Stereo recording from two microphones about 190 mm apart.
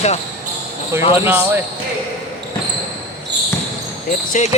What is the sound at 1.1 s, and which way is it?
Speech, 10° right (ahead or behind).